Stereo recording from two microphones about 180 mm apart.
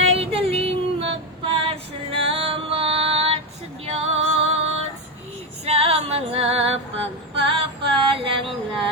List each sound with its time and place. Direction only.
0.1 s female singing: 35° right (ahead or behind)
2.1 s music: 30° right (ahead or behind)
3.8 s female singing: 35° right (ahead or behind)
7.4 s a sound: 30° right (ahead or behind)